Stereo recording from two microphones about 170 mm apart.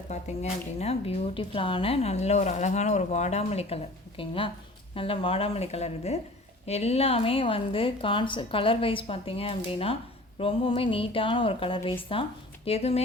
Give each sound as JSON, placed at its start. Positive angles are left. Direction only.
{"t": 0.1, "sound": "a woman's voice", "side_deg": 40}